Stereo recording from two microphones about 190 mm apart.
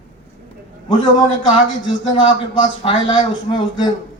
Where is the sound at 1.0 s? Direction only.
25° left (ahead or behind).